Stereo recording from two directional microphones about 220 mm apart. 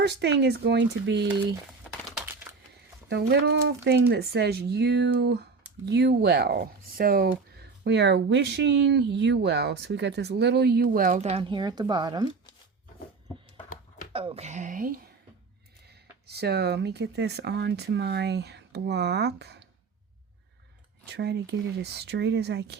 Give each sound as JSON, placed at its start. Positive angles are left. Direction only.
{"t": 0.0, "sound": "speech", "side_deg": -50}
{"t": 2.0, "sound": "a sound", "side_deg": -5}
{"t": 3.1, "sound": "speech", "side_deg": -50}
{"t": 14.1, "sound": "speech", "side_deg": -25}
{"t": 16.2, "sound": "speech", "side_deg": -45}
{"t": 21.1, "sound": "speech", "side_deg": -50}